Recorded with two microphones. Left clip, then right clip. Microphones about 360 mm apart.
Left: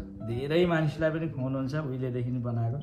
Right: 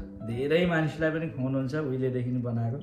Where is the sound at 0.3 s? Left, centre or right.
Left.